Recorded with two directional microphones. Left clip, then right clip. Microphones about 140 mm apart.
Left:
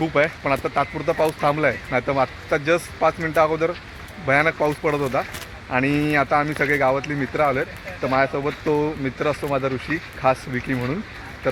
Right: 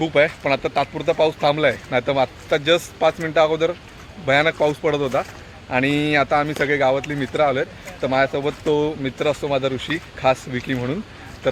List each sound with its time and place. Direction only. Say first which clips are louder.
0.0 s speech: right 2 dB; 30° right (ahead or behind)